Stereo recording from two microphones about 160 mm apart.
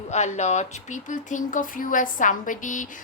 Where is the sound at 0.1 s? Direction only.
45° left (ahead or behind).